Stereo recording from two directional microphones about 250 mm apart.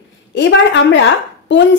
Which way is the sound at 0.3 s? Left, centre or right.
Left.